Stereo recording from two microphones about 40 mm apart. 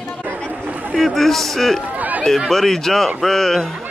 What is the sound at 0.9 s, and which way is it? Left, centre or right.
Speech, centre.